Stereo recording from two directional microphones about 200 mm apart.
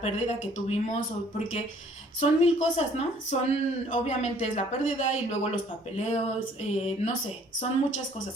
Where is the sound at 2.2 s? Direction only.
35° left (ahead or behind).